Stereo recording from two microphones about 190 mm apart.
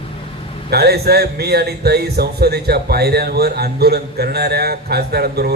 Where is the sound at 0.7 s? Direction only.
55° right (ahead or behind).